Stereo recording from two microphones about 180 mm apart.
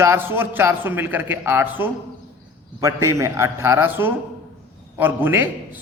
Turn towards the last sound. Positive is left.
turn(degrees=-10)  # may be behind; listen again after turning